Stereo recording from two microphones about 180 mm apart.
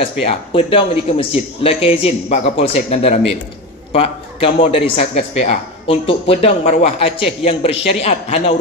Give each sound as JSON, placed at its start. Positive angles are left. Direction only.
{"t": 0.2, "sound": "speech", "side_deg": 30}